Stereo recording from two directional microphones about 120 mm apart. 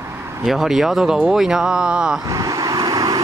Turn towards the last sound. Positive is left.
turn(degrees=-30)  # may be behind; listen again after turning